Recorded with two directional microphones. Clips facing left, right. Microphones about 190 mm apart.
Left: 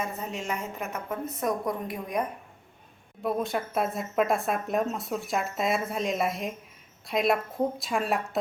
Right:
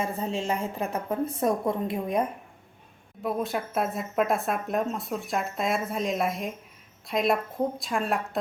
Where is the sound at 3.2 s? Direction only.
Centre (ahead or behind).